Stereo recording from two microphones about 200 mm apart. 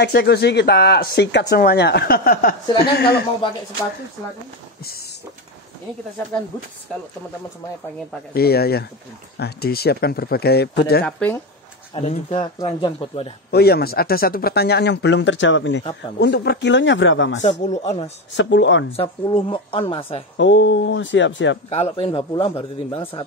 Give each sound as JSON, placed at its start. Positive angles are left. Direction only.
{"t": 0.0, "sound": "speech", "side_deg": 55}
{"t": 8.4, "sound": "speech", "side_deg": 50}
{"t": 11.1, "sound": "speech", "side_deg": 5}
{"t": 11.9, "sound": "speech", "side_deg": 30}
{"t": 13.5, "sound": "speech", "side_deg": 50}
{"t": 16.2, "sound": "speech", "side_deg": 55}
{"t": 17.4, "sound": "speech", "side_deg": 35}
{"t": 18.3, "sound": "speech", "side_deg": 65}
{"t": 18.9, "sound": "speech", "side_deg": 25}
{"t": 20.3, "sound": "speech", "side_deg": 65}
{"t": 21.6, "sound": "speech", "side_deg": 30}